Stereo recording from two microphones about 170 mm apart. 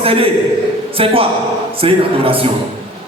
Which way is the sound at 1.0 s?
35° right (ahead or behind).